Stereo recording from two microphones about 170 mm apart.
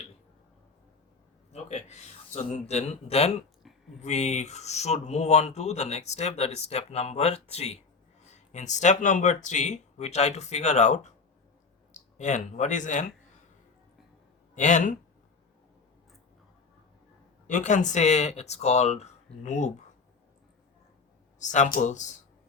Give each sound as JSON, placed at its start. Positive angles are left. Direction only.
{"t": 1.5, "sound": "speech", "side_deg": 40}
{"t": 14.5, "sound": "speech", "side_deg": 45}
{"t": 17.4, "sound": "speech", "side_deg": 45}
{"t": 21.3, "sound": "speech", "side_deg": 45}